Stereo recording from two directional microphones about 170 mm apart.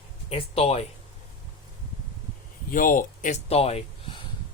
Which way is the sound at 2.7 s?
55° left (ahead or behind).